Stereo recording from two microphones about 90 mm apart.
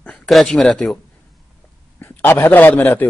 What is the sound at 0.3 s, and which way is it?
Speech, 5° left (ahead or behind).